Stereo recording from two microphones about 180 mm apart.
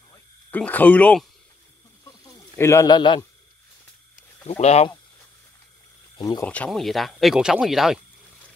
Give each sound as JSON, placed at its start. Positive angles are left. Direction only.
{"t": 0.5, "sound": "speech", "side_deg": 10}
{"t": 2.2, "sound": "speech", "side_deg": 15}
{"t": 4.5, "sound": "speech", "side_deg": 35}
{"t": 6.1, "sound": "speech", "side_deg": 20}
{"t": 6.4, "sound": "speech", "side_deg": 5}